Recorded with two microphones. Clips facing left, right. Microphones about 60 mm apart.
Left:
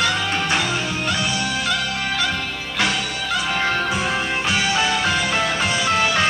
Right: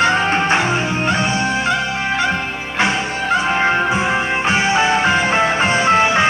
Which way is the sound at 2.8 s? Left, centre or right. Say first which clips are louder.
Right 5 dB; right.